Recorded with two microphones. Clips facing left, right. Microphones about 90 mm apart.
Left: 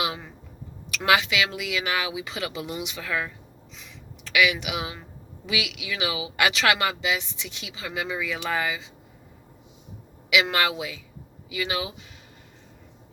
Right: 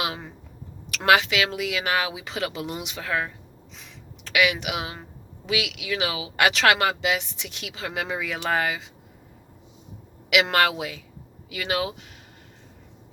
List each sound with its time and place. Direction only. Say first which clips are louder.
1.0 s speech: right 2 dB; 45° right (ahead or behind)
4.4 s speech: even; 45° right (ahead or behind)
10.3 s speech: right 2 dB; 50° right (ahead or behind)